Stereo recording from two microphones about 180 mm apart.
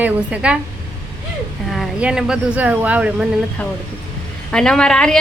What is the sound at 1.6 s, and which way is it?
Speech, centre (ahead or behind).